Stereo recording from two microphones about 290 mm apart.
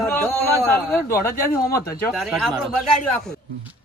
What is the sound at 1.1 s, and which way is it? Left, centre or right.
Speech, left.